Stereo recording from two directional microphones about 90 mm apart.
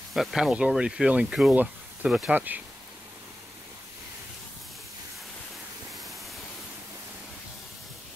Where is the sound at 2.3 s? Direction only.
20° right (ahead or behind).